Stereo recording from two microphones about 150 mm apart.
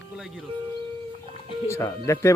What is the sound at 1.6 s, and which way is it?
Speech, 20° left (ahead or behind).